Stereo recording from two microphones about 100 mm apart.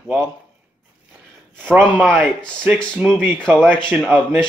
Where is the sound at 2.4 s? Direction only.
10° left (ahead or behind).